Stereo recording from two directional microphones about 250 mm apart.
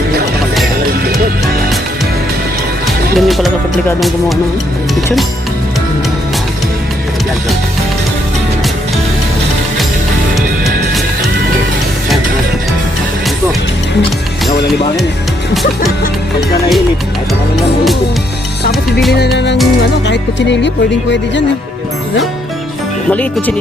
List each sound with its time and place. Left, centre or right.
3.2 s speech: centre
19.1 s music: left
23.0 s speech: centre